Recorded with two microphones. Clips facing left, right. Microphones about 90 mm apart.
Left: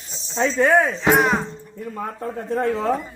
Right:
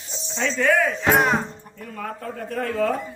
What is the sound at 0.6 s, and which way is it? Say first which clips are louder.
Speech: left 3 dB; 25° left (ahead or behind).